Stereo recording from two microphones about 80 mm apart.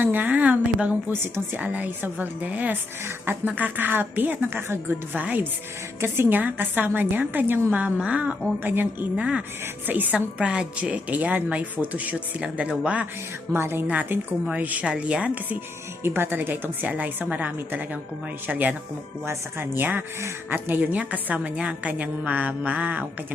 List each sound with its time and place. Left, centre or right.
0.0 s a woman's voice: right
13.5 s a woman's voice: right
13.8 s a woman's voice: centre
16.0 s a woman's voice: right
19.2 s a woman's voice: right